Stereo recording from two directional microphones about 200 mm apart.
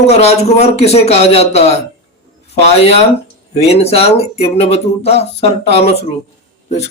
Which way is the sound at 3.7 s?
30° left (ahead or behind).